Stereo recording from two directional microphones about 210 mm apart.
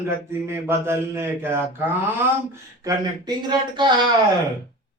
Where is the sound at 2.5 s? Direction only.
20° right (ahead or behind).